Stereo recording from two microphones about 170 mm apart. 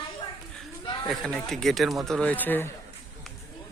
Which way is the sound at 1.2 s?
5° left (ahead or behind).